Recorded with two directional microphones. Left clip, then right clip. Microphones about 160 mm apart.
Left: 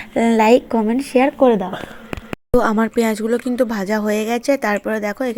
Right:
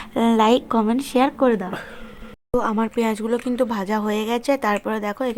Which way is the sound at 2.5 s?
25° left (ahead or behind).